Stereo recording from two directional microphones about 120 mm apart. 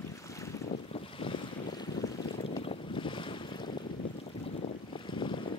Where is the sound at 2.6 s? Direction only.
50° left (ahead or behind).